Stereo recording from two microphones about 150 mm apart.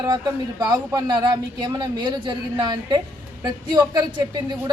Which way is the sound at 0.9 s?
30° right (ahead or behind).